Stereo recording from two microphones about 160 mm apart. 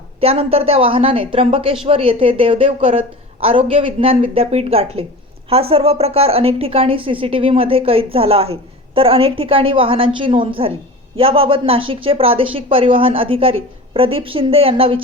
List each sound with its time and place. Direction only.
0.2 s speech: 35° right (ahead or behind)